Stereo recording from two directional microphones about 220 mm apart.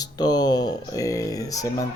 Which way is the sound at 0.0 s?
15° left (ahead or behind).